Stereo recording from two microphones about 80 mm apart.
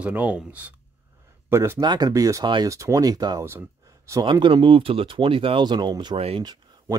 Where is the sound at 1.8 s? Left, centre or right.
Right.